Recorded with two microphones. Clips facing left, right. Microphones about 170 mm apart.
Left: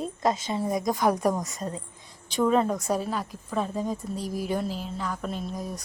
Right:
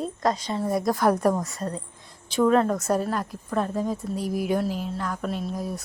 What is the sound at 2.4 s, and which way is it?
Speech, centre (ahead or behind).